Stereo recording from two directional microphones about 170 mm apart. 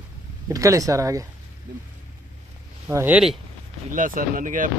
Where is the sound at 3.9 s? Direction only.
50° right (ahead or behind).